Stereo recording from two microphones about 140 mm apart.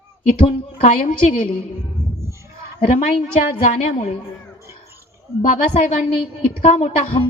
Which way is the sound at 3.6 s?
55° left (ahead or behind).